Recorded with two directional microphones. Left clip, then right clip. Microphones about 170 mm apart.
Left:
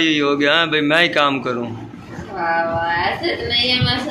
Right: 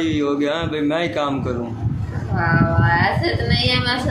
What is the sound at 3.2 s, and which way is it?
Music, 10° right (ahead or behind).